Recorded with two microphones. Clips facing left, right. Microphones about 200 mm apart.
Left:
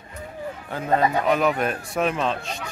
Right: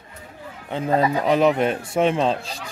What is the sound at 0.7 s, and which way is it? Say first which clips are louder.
Speech: right 2 dB; 25° right (ahead or behind).